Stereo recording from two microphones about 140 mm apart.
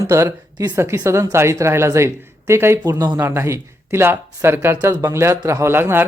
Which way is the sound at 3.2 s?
20° right (ahead or behind).